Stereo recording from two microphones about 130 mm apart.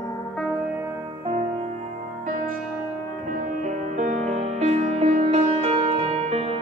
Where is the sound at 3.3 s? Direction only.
80° right.